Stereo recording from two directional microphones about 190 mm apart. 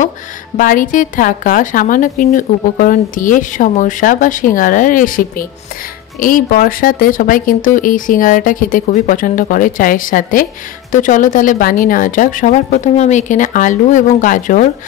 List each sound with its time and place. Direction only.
0.6 s a woman's voice: 45° left (ahead or behind)